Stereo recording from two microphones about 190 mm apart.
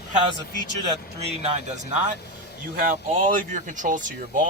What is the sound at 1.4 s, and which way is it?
Speech, 35° right (ahead or behind).